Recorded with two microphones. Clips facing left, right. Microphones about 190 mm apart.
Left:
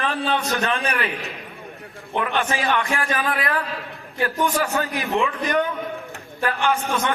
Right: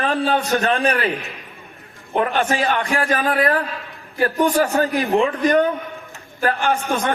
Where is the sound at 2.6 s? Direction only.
35° right (ahead or behind).